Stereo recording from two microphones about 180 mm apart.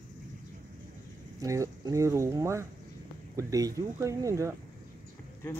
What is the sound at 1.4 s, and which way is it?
Speech, 15° right (ahead or behind).